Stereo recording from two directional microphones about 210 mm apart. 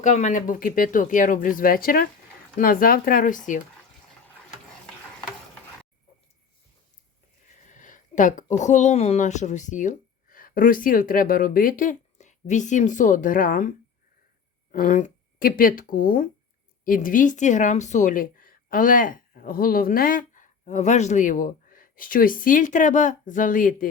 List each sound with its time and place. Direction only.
0.0 s speech: 35° left (ahead or behind)
7.7 s speech: 40° left (ahead or behind)